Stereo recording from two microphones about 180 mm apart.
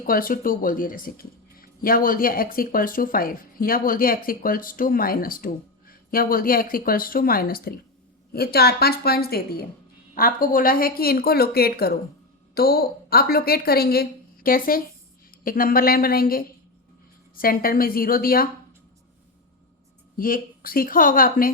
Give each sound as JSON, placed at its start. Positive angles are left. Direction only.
{"t": 0.0, "sound": "a woman's voice", "side_deg": 50}
{"t": 20.1, "sound": "speech", "side_deg": 50}